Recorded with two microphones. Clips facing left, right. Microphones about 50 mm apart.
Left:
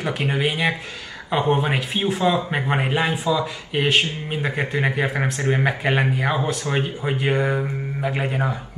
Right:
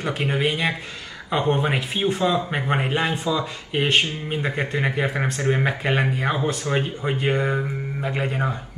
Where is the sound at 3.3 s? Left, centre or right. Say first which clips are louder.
Left 2 dB; centre.